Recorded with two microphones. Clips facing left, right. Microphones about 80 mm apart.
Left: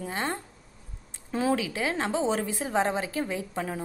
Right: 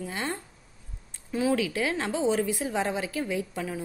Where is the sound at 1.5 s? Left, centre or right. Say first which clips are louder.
Right 1 dB; left.